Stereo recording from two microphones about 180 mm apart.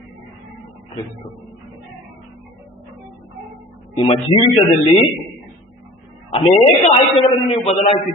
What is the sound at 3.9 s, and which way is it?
Speech, 30° left (ahead or behind).